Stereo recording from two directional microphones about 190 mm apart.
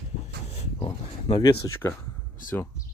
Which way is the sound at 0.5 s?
35° left (ahead or behind).